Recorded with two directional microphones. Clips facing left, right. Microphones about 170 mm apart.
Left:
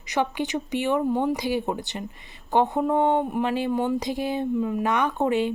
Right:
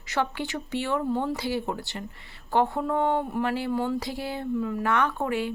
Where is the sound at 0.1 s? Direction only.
15° left (ahead or behind).